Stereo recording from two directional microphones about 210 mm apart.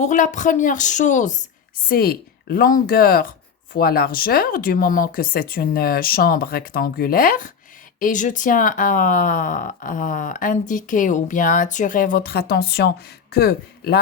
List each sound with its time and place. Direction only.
0.0 s speech: 35° left (ahead or behind)